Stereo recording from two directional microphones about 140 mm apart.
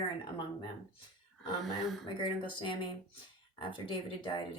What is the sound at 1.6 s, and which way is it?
Speech, centre (ahead or behind).